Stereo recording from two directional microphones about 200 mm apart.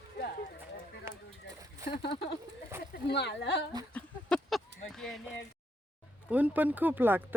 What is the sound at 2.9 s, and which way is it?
Speech, 55° left (ahead or behind).